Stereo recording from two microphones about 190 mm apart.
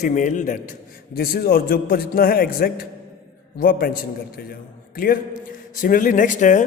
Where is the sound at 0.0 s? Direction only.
40° left (ahead or behind).